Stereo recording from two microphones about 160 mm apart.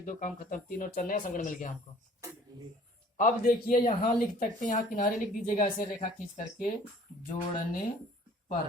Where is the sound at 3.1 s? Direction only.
55° left (ahead or behind).